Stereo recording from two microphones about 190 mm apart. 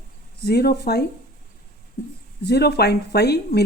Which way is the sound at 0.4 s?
55° left (ahead or behind).